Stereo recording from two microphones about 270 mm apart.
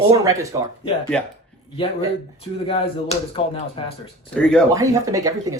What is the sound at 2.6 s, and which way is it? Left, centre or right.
Speech, centre.